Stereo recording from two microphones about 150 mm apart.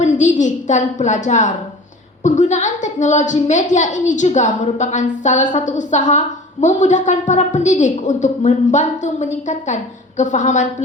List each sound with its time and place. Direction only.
0.0 s a woman's voice: 55° left (ahead or behind)